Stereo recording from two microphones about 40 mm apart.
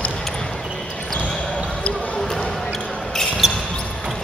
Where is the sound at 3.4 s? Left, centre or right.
Centre.